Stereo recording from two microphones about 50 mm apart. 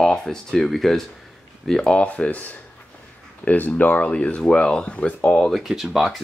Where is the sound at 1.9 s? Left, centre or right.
Left.